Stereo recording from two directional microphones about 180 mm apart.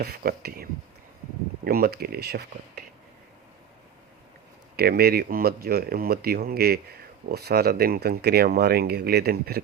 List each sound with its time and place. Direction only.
0.0 s speech: 60° right (ahead or behind)
4.8 s speech: 60° right (ahead or behind)